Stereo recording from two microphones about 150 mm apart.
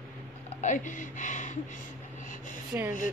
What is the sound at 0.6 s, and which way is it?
Speech, 55° left (ahead or behind).